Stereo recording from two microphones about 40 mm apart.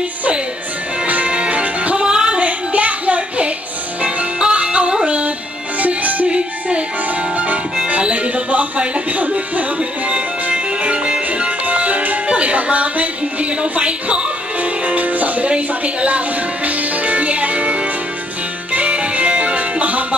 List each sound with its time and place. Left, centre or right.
1.0 s music: right
2.0 s a sound: right
2.3 s a sound: right
4.0 s music: right
5.8 s music: right
6.2 s music: right
7.3 s music: right
7.9 s speech: right
9.8 s music: right
12.3 s speech: right
16.6 s music: right